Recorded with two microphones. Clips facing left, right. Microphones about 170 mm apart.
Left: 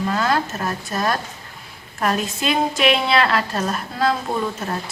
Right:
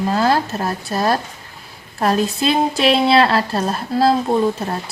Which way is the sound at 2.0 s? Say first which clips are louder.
Right 5 dB; 35° right (ahead or behind).